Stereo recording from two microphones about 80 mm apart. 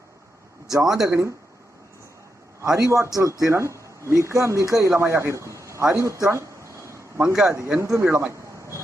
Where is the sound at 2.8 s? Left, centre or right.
Right.